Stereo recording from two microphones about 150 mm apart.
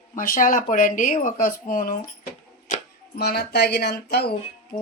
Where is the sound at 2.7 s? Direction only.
55° left (ahead or behind).